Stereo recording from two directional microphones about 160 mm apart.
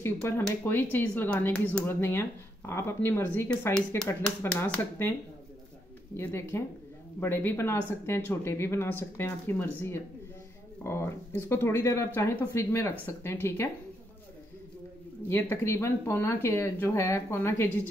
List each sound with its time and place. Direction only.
0.0 s speech: 20° left (ahead or behind)
6.1 s speech: 15° left (ahead or behind)
15.2 s speech: 15° left (ahead or behind)